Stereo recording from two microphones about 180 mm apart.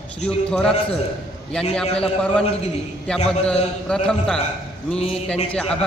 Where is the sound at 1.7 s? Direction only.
5° left (ahead or behind).